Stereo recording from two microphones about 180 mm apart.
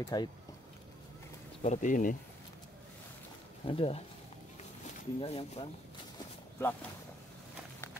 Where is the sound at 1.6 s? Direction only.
40° left (ahead or behind).